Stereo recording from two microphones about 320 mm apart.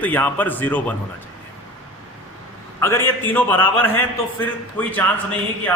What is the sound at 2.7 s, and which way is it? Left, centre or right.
A man's voice, centre.